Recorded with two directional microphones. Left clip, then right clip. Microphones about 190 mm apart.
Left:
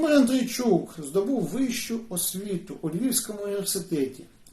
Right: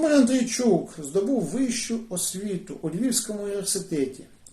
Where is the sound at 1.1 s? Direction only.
5° right (ahead or behind).